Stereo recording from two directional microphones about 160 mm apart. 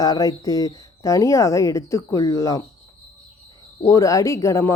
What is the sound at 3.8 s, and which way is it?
Speech, 20° left (ahead or behind).